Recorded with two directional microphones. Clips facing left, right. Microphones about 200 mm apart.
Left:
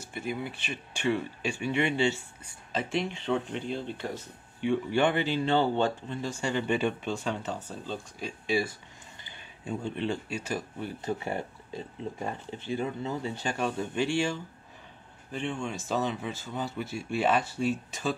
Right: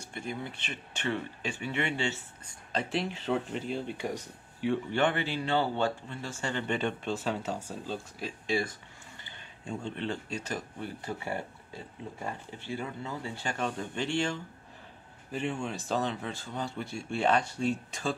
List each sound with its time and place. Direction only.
0.0 s speech: 5° left (ahead or behind)
2.7 s speech: centre (ahead or behind)
4.6 s speech: centre (ahead or behind)
4.9 s speech: 15° left (ahead or behind); by 8.3 s 10° right (ahead or behind)
8.5 s speech: 5° left (ahead or behind)
11.0 s speech: 20° left (ahead or behind)
15.3 s speech: 5° right (ahead or behind)